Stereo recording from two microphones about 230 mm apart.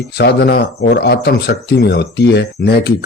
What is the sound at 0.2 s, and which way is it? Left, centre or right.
Speech, left.